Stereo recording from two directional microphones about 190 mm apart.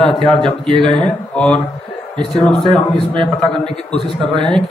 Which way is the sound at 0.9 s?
5° left (ahead or behind).